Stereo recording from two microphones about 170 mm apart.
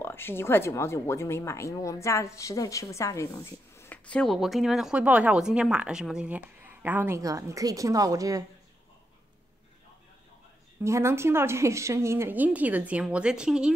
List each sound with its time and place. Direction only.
0.0 s speech: 15° left (ahead or behind); by 8.5 s 20° right (ahead or behind)
10.8 s speech: 15° right (ahead or behind)